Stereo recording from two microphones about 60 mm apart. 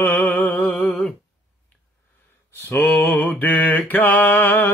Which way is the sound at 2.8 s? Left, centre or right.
Left.